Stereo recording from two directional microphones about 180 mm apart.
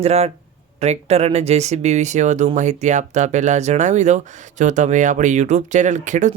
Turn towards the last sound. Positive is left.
turn(degrees=-40)  # may be behind; listen again after turning